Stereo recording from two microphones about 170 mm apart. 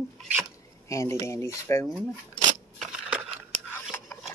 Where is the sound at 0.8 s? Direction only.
15° left (ahead or behind).